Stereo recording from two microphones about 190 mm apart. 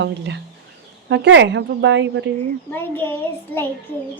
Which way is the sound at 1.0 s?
65° right (ahead or behind).